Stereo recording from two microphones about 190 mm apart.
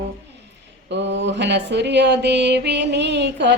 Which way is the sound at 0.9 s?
70° right (ahead or behind).